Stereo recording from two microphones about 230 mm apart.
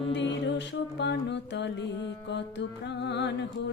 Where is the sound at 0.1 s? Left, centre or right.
Left.